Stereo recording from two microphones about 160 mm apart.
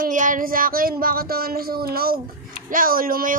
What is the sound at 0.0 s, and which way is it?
Speech, 55° right (ahead or behind).